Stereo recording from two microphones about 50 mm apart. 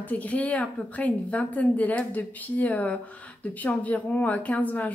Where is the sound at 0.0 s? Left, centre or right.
Left.